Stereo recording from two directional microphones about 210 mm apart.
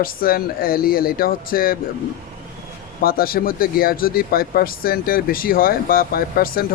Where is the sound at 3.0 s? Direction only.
45° left (ahead or behind).